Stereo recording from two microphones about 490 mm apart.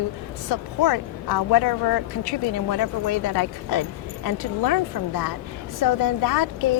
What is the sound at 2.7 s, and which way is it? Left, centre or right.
Speech, left.